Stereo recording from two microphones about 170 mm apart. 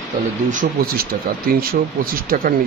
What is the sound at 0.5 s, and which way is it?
Speech, 55° right (ahead or behind).